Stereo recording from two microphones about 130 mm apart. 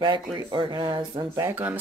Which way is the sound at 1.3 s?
15° right (ahead or behind).